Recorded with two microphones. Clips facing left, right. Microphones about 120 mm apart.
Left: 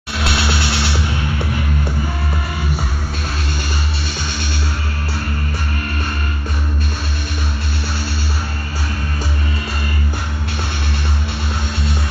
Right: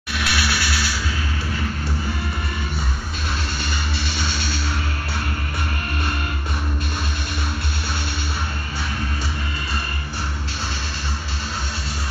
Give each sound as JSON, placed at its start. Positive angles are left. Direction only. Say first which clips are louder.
{"t": 0.2, "sound": "music", "louder": "left 4 dB", "side_deg": 25}